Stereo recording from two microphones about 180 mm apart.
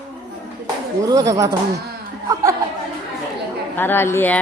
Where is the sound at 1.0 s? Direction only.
20° right (ahead or behind).